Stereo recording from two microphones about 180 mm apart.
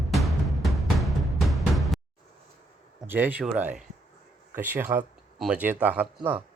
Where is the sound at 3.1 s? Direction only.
10° right (ahead or behind).